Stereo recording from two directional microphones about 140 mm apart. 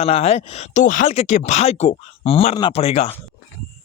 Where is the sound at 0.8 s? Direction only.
65° left (ahead or behind); by 3.1 s 45° left (ahead or behind).